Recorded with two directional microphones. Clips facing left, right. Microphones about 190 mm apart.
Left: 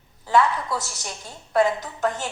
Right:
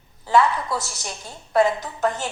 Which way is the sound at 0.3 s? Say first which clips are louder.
Right 1 dB; 30° right (ahead or behind).